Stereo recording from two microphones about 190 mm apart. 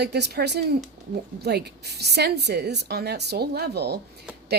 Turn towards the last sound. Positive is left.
turn(degrees=-60)  # may be behind; listen again after turning